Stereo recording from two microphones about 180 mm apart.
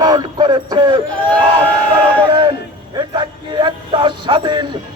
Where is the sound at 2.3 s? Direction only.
25° right (ahead or behind).